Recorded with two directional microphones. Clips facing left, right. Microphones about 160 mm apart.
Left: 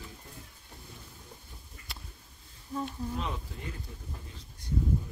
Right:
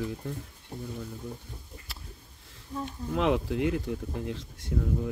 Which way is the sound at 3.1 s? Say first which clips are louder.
Right 11 dB; 90° right.